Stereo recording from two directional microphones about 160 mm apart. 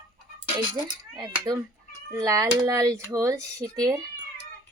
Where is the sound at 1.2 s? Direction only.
25° right (ahead or behind).